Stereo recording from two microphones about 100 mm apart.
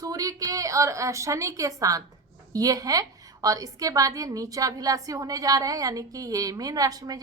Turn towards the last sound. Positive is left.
turn(degrees=-40)  # may be behind; listen again after turning